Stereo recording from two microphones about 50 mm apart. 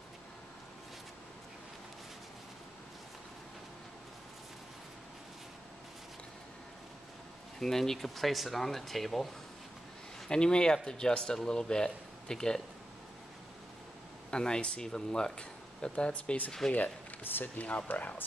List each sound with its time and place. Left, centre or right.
7.5 s speech: centre
10.2 s speech: centre
14.3 s speech: centre
16.7 s speech: left